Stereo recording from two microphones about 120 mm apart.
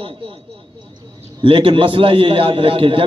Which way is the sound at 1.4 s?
50° right (ahead or behind).